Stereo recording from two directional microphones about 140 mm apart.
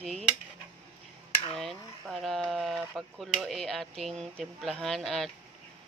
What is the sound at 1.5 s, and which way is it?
Speech, centre (ahead or behind).